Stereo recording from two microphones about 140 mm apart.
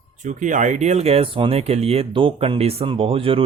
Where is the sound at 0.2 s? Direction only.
60° right (ahead or behind).